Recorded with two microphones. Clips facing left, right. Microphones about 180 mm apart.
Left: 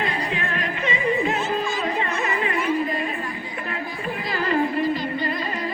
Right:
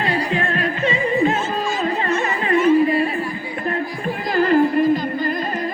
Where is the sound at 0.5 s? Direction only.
35° right (ahead or behind).